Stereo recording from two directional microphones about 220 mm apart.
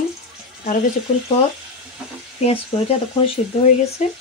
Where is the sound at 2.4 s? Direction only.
25° left (ahead or behind).